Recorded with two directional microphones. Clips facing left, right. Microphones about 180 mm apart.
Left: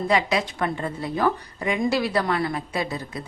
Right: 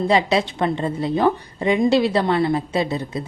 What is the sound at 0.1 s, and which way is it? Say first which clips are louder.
A woman's voice: right 2 dB; 30° right (ahead or behind).